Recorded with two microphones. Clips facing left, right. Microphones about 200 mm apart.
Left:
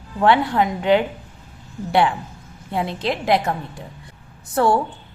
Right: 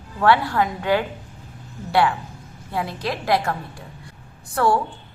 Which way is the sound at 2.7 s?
25° left (ahead or behind).